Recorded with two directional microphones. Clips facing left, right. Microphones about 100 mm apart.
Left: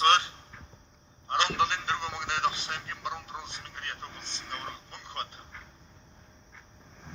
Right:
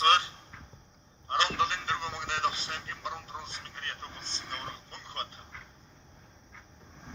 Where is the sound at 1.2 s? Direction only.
20° left (ahead or behind).